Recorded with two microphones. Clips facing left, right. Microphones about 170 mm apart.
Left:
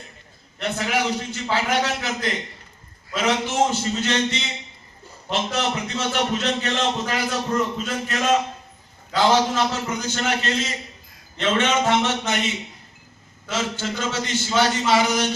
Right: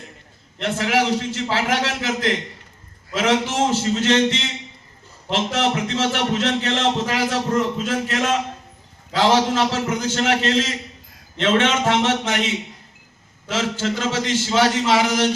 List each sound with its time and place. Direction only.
0.6 s music: 90° right